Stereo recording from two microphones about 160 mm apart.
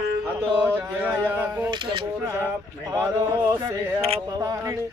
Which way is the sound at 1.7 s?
30° right (ahead or behind).